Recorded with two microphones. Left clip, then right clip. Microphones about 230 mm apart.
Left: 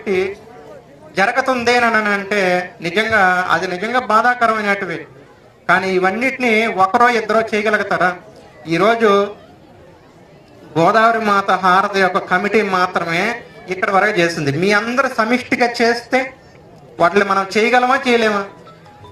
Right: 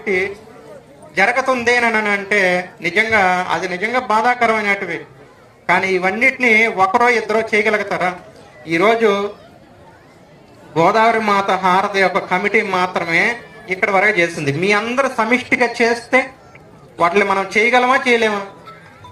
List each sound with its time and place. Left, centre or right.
0.0 s a man's voice: left
10.8 s a man's voice: left